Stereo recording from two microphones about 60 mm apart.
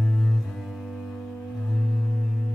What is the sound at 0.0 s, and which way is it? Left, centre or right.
Cello, centre.